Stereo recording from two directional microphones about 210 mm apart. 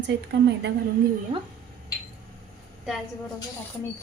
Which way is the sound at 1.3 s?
25° right (ahead or behind).